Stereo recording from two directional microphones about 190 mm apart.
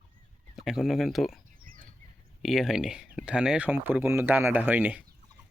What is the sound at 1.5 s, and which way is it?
Chop, 45° right (ahead or behind).